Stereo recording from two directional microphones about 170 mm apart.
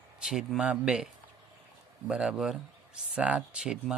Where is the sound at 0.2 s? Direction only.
5° right (ahead or behind).